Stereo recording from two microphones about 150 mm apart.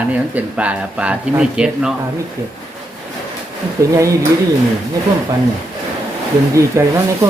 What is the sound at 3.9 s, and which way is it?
Speech, 20° right (ahead or behind).